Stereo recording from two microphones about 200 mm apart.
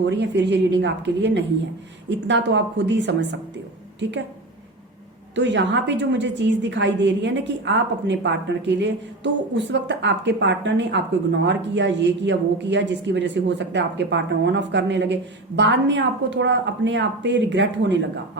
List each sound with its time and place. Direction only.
0.0 s a woman's voice: 60° right (ahead or behind)
5.3 s a woman's voice: 60° right (ahead or behind)